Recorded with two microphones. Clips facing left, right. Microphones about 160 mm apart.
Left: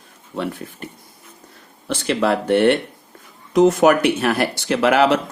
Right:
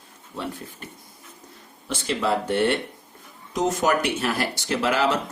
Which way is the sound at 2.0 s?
65° left (ahead or behind).